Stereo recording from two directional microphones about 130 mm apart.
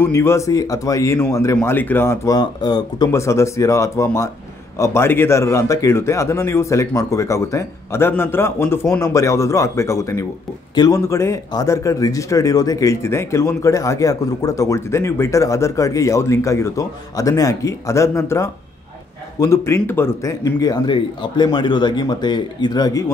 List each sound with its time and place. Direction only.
0.0 s a man's voice: 20° left (ahead or behind)
2.3 s a man's voice: 30° left (ahead or behind)